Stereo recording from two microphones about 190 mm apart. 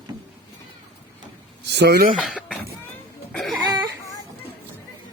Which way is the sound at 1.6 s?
60° right (ahead or behind).